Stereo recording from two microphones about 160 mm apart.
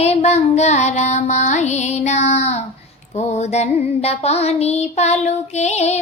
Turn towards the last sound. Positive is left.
turn(degrees=45)  # may be behind; listen again after turning